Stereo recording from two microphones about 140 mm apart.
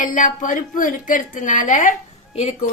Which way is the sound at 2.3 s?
50° left (ahead or behind).